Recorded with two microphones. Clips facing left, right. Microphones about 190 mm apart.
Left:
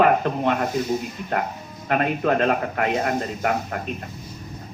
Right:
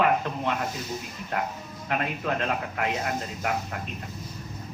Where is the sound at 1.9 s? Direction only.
55° left (ahead or behind).